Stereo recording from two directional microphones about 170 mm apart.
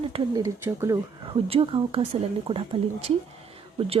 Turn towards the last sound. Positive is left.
turn(degrees=-35)  # may be behind; listen again after turning